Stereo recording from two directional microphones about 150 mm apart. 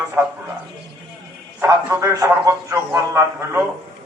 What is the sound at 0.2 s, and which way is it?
Speech, 15° right (ahead or behind).